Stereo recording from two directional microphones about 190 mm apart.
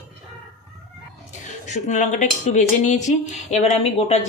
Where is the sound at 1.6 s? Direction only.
40° left (ahead or behind).